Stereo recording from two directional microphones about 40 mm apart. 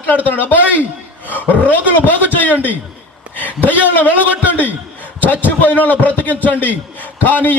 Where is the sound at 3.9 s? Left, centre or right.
Left.